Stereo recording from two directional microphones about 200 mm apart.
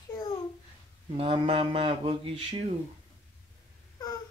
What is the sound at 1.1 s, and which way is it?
Speech, 30° right (ahead or behind).